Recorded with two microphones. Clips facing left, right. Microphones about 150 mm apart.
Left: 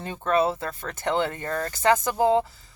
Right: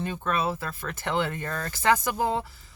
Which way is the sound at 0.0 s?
30° left (ahead or behind).